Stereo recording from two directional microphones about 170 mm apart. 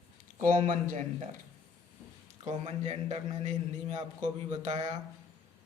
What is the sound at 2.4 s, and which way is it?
A man's voice, 35° right (ahead or behind).